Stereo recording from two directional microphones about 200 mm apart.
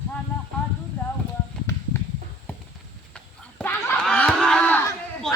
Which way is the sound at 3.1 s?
10° left (ahead or behind).